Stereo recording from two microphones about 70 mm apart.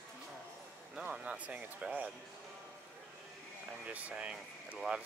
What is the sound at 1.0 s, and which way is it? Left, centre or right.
Speech, centre.